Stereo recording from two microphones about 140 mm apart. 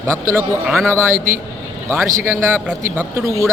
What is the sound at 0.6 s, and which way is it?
Speech, centre (ahead or behind).